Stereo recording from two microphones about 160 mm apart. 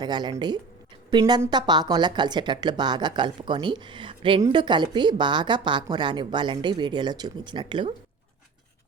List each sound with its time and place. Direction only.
0.0 s speech: 25° right (ahead or behind)